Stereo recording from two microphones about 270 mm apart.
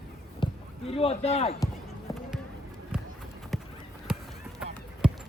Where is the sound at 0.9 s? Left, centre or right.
Left.